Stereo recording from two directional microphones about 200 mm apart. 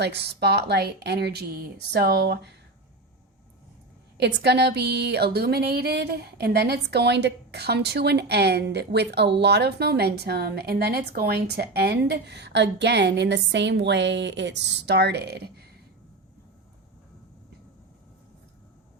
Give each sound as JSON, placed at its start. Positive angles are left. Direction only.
{"t": 0.0, "sound": "speech", "side_deg": -55}
{"t": 4.2, "sound": "speech", "side_deg": -55}